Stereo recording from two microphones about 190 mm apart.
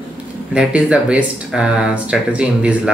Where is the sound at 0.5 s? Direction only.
5° right (ahead or behind).